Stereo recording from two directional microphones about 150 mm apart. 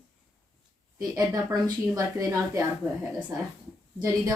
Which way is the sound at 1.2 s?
25° right (ahead or behind).